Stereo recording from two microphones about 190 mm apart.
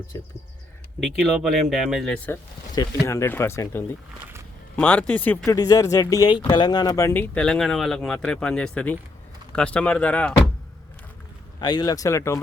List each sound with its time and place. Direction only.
0.9 s speech: centre (ahead or behind)
11.6 s speech: 20° left (ahead or behind)